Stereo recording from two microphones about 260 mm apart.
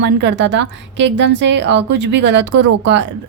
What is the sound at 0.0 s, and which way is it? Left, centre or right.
Speech, right.